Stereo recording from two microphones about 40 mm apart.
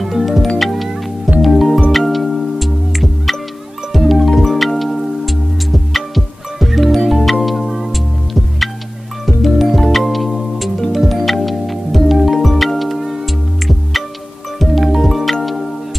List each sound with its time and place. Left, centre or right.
0.0 s music: centre
9.2 s music: centre
14.6 s music: centre